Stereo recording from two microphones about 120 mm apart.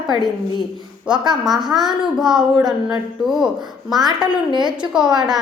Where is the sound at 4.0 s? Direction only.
35° right (ahead or behind).